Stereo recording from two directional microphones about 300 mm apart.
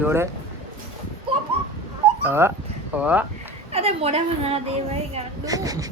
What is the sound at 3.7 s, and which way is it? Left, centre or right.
A woman's voice, centre.